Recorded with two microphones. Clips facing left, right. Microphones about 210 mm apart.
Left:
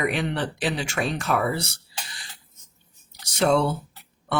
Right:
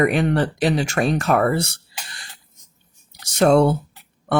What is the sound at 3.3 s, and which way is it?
Speech, 45° right (ahead or behind).